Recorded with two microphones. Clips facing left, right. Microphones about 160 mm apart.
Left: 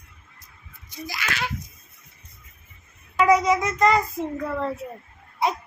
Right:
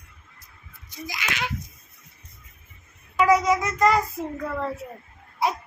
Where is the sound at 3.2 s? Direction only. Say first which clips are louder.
Left 1 dB; centre (ahead or behind).